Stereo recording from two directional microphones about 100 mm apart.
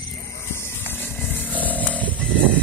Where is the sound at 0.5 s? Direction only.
25° left (ahead or behind).